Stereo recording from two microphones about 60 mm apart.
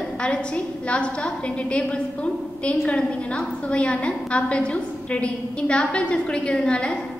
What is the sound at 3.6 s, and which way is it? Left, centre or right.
A woman's voice, centre.